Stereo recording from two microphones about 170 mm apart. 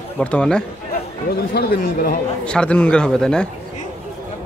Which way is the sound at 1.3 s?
65° left (ahead or behind).